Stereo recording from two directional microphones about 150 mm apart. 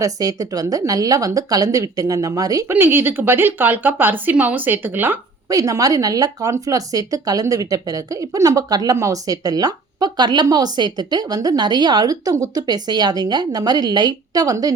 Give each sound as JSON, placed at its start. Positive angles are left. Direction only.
{"t": 0.0, "sound": "speech", "side_deg": -25}